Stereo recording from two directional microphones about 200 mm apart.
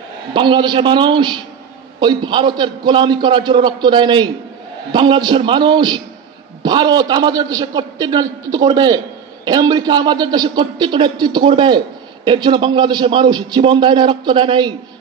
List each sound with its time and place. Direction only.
0.3 s a man's voice: 25° right (ahead or behind)